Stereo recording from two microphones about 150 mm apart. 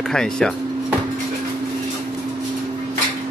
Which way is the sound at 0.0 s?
5° left (ahead or behind).